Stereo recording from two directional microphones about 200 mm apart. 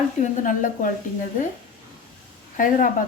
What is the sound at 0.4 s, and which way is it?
Speech, 40° left (ahead or behind).